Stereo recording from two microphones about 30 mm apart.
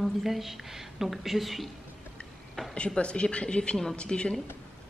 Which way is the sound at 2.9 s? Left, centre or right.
Left.